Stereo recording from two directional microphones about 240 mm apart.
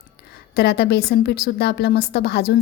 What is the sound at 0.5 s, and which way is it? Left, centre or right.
A woman's voice, left.